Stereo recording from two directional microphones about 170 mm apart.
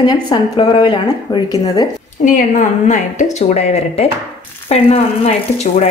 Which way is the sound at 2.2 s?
45° left (ahead or behind).